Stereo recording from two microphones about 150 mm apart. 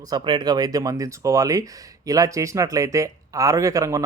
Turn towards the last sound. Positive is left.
turn(degrees=-20)  # may be behind; listen again after turning